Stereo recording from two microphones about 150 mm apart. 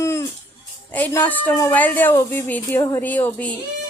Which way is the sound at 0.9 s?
10° left (ahead or behind).